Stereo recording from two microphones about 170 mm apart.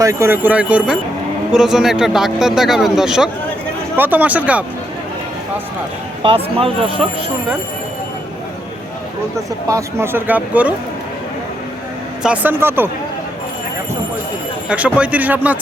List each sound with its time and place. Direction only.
0.0 s speech: 15° right (ahead or behind)
6.2 s speech: 30° right (ahead or behind)
9.6 s speech: 15° right (ahead or behind)
12.2 s speech: 10° right (ahead or behind)
14.7 s speech: 5° right (ahead or behind)